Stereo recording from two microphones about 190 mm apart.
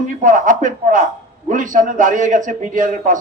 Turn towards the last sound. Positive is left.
turn(degrees=-40)  # may be behind; listen again after turning